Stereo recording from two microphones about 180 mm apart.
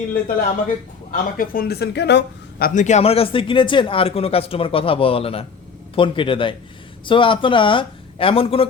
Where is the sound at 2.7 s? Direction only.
40° left (ahead or behind).